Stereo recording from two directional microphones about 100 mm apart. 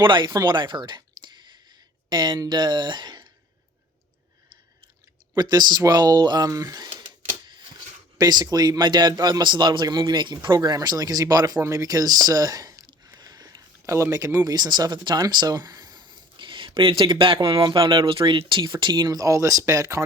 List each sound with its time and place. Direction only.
0.0 s speech: 55° right (ahead or behind)
0.4 s clicking: 50° right (ahead or behind)
2.0 s speech: 50° right (ahead or behind)
5.4 s speech: 45° right (ahead or behind)
8.2 s speech: 45° right (ahead or behind)